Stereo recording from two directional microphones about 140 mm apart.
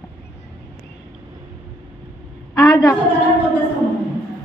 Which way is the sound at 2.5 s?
25° left (ahead or behind).